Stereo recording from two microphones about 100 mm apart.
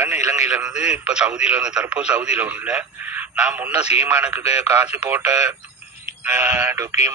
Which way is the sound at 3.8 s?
90° left.